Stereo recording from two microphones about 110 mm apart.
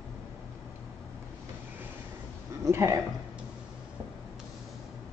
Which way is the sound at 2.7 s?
25° right (ahead or behind).